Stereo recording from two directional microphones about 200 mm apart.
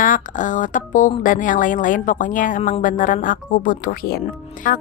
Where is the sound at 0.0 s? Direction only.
40° left (ahead or behind).